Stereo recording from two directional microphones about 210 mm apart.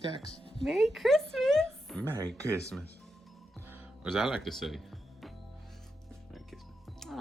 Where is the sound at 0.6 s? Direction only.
Centre (ahead or behind).